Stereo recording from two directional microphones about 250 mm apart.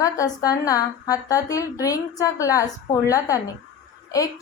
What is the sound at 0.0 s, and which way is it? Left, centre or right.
A woman's voice, centre.